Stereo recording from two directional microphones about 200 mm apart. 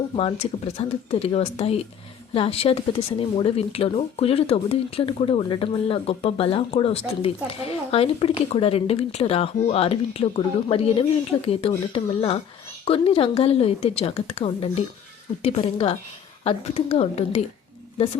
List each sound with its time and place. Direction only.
0.8 s speech: 30° left (ahead or behind)